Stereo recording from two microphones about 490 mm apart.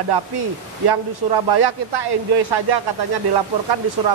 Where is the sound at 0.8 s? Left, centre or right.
Right.